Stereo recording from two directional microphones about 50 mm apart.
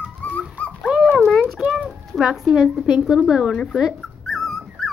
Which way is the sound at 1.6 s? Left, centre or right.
Right.